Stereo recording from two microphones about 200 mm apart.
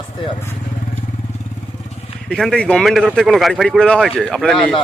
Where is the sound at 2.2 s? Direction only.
5° left (ahead or behind).